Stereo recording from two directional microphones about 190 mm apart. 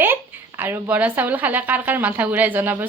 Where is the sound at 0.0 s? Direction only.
10° right (ahead or behind).